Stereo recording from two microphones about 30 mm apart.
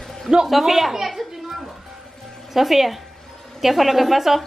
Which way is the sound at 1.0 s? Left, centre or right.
Centre.